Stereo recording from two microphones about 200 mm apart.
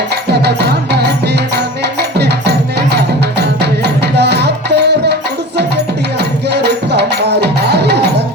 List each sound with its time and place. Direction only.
0.3 s music: 55° right (ahead or behind)
6.5 s music: 55° right (ahead or behind)